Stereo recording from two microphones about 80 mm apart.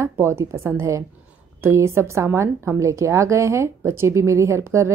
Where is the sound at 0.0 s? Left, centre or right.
Right.